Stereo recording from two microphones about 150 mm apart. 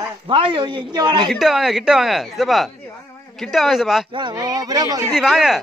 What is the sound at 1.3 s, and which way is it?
A man's voice, centre (ahead or behind).